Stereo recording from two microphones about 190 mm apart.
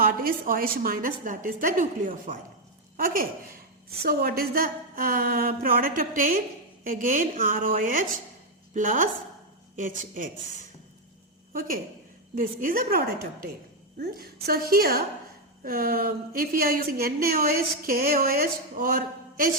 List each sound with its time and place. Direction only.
0.0 s a woman's voice: 50° right (ahead or behind)
12.3 s a woman's voice: 45° right (ahead or behind)
14.4 s a woman's voice: 55° right (ahead or behind)